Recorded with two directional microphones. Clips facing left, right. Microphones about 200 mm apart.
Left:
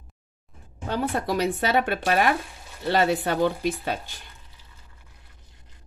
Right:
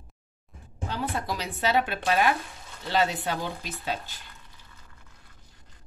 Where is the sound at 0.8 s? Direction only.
55° left (ahead or behind).